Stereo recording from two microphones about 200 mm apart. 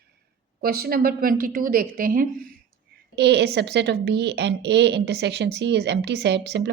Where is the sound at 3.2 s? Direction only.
60° right (ahead or behind).